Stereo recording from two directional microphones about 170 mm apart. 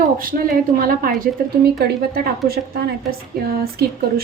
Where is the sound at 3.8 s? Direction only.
65° right (ahead or behind).